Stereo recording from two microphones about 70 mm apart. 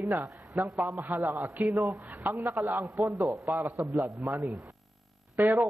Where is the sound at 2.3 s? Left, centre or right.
Right.